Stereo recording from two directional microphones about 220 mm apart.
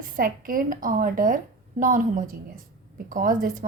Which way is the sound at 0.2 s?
40° right (ahead or behind).